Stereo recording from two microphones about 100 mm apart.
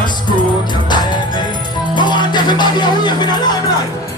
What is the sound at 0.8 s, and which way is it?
Music, 45° left (ahead or behind).